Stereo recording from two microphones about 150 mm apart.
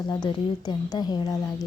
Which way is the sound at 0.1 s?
30° left (ahead or behind).